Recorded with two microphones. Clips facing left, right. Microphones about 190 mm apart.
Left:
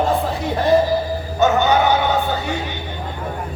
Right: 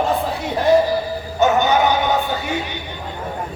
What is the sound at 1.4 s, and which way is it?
Music, 15° right (ahead or behind).